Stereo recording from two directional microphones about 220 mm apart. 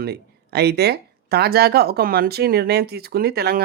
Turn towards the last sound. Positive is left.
turn(degrees=-45)  # may be behind; listen again after turning